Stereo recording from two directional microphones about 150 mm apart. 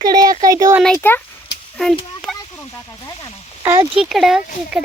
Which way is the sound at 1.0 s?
10° left (ahead or behind).